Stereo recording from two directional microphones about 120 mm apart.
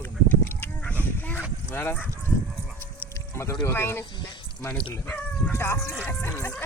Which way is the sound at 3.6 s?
20° left (ahead or behind).